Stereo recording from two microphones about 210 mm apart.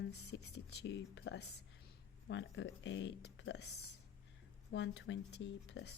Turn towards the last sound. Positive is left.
turn(degrees=55)  # may be behind; listen again after turning